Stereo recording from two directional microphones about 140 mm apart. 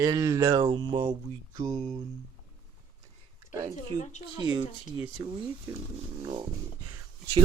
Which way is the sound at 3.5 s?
25° right (ahead or behind).